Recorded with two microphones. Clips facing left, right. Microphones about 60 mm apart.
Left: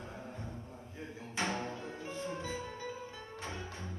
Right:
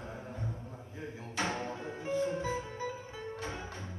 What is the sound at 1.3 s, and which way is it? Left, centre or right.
Music, right.